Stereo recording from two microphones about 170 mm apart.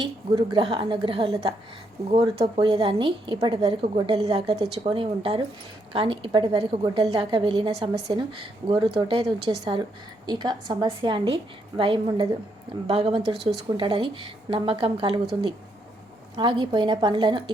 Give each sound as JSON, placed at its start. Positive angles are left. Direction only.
{"t": 0.0, "sound": "a woman's voice", "side_deg": -30}
{"t": 16.4, "sound": "a woman's voice", "side_deg": -25}